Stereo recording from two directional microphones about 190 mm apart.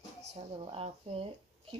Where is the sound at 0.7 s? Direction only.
30° right (ahead or behind).